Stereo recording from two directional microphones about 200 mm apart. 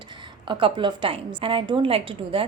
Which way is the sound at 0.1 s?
25° right (ahead or behind).